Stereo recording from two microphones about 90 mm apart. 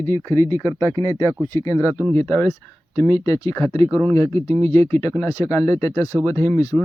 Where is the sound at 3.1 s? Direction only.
40° left (ahead or behind).